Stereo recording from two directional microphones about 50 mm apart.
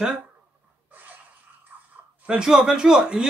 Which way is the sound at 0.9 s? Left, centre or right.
Right.